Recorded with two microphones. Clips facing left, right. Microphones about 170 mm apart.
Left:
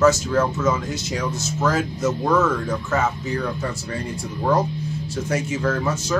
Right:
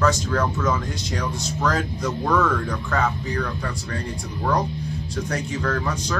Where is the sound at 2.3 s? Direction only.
20° left (ahead or behind).